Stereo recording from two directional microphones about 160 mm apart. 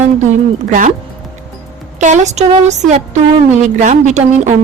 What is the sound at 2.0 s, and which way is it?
A woman's voice, 50° right (ahead or behind).